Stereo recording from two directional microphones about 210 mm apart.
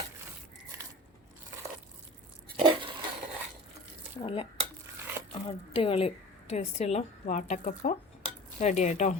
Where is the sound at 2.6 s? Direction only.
25° right (ahead or behind).